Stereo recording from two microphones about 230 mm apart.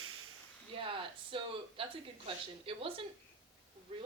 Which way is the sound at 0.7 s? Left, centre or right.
Right.